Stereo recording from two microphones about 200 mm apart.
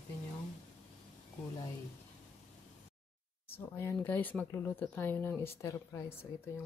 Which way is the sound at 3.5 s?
10° left (ahead or behind).